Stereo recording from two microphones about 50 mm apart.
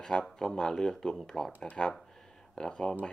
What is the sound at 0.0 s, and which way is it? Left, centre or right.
Speech, centre.